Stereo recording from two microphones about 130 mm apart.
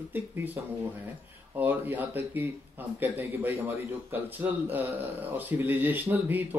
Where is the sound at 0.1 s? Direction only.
15° right (ahead or behind).